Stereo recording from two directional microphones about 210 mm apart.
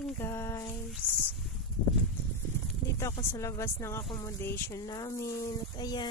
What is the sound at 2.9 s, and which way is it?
Speech, 15° left (ahead or behind).